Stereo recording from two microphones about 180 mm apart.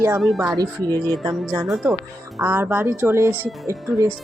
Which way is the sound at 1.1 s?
Centre (ahead or behind).